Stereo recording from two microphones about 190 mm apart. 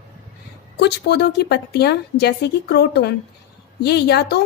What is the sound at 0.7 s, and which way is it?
Speech, 60° left (ahead or behind).